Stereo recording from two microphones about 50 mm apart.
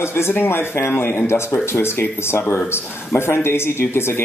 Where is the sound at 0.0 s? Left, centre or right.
Left.